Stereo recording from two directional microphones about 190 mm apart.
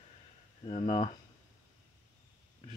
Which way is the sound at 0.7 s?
35° left (ahead or behind).